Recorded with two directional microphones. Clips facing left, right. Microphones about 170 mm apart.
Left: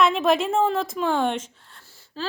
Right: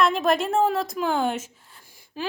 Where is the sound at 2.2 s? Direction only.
15° right (ahead or behind).